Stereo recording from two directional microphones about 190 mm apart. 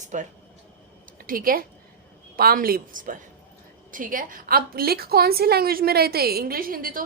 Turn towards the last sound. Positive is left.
turn(degrees=-45)  # may be behind; listen again after turning